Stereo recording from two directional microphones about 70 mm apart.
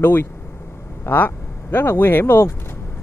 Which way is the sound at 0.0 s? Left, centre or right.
Left.